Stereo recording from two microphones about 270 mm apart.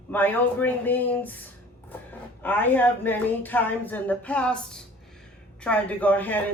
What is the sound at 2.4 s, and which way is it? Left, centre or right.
Speech, centre.